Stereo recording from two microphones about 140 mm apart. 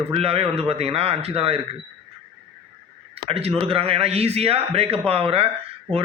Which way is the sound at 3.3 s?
45° right (ahead or behind).